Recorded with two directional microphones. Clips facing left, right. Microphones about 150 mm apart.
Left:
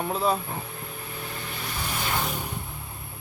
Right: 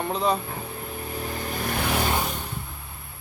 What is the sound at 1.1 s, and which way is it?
Vehicle, 40° right (ahead or behind).